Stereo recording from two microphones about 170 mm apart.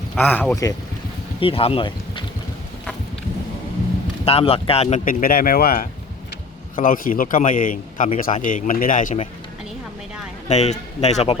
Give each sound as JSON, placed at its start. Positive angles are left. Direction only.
{"t": 0.2, "sound": "speech", "side_deg": 10}
{"t": 1.4, "sound": "speech", "side_deg": 35}
{"t": 4.3, "sound": "speech", "side_deg": 35}
{"t": 5.0, "sound": "a man's voice", "side_deg": 60}
{"t": 10.5, "sound": "speech", "side_deg": 40}